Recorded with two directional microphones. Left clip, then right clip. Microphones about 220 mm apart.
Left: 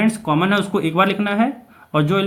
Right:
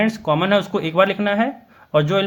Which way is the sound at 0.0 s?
30° right (ahead or behind).